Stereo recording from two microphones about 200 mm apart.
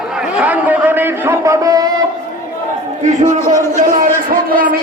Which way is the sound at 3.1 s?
35° right (ahead or behind).